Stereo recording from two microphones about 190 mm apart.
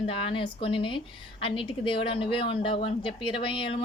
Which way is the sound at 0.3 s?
30° left (ahead or behind).